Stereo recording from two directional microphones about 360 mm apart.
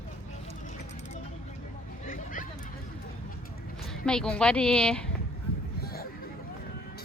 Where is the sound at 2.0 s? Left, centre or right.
Left.